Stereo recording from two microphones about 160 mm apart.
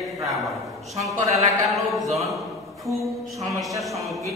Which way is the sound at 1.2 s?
45° right (ahead or behind).